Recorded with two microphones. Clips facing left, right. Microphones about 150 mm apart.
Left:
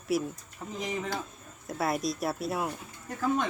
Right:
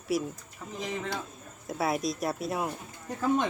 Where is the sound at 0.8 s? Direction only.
15° left (ahead or behind).